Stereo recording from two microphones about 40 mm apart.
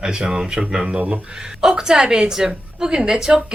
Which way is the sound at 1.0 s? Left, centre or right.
Right.